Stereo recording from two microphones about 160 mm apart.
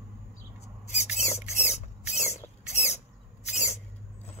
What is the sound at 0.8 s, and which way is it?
Rodents, 45° left (ahead or behind).